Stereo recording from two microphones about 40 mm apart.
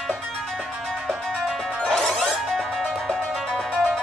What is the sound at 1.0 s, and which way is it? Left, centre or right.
Music, centre.